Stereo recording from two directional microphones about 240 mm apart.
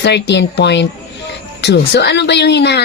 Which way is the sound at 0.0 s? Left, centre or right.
Left.